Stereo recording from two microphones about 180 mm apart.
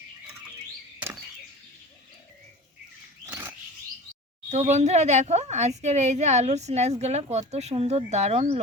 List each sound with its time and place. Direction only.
4.4 s speech: 40° right (ahead or behind)